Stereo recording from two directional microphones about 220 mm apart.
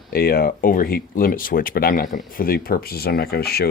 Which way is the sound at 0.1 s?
45° left (ahead or behind).